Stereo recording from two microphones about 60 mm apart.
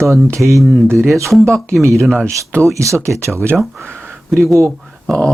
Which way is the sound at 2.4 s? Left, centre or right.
Right.